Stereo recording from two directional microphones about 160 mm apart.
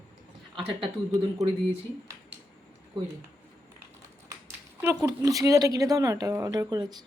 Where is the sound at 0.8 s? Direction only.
25° right (ahead or behind).